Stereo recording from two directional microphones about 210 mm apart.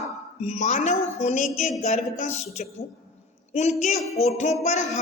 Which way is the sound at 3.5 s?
30° left (ahead or behind).